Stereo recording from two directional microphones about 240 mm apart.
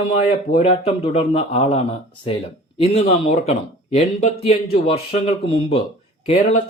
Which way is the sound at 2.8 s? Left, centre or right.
Left.